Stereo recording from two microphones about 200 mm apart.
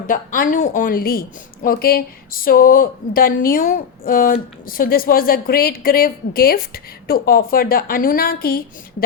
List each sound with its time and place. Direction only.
0.1 s a woman's voice: 40° left (ahead or behind)